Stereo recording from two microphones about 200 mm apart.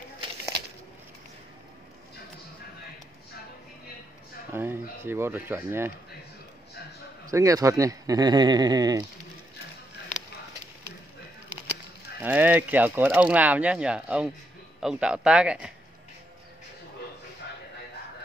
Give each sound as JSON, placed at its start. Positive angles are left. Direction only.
{"t": 4.5, "sound": "speech", "side_deg": -10}
{"t": 7.2, "sound": "speech", "side_deg": -15}
{"t": 12.2, "sound": "speech", "side_deg": -10}